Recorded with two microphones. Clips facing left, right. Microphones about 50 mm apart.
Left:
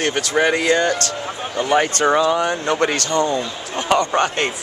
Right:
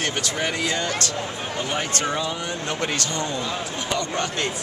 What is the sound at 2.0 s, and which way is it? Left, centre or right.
Speech, left.